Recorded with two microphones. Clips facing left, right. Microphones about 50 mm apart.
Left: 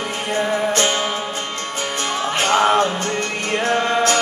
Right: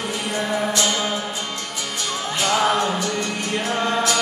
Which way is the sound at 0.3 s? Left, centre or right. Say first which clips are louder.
Left 4 dB; left.